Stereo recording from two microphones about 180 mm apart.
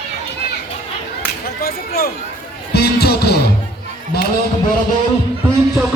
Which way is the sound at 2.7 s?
60° left (ahead or behind).